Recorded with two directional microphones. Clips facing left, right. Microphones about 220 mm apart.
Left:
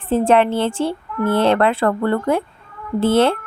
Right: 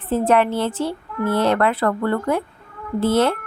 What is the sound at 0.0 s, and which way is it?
Speech, 30° left (ahead or behind).